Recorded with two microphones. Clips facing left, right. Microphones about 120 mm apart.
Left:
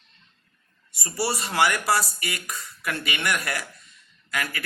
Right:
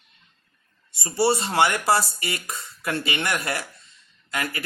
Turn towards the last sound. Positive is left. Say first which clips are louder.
# right 1 dB
turn(degrees=-25)  # may be behind; listen again after turning